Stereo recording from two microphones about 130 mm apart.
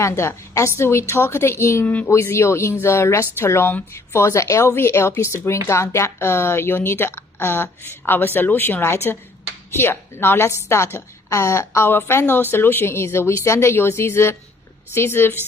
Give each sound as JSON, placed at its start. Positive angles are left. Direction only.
{"t": 0.0, "sound": "a woman's voice", "side_deg": 20}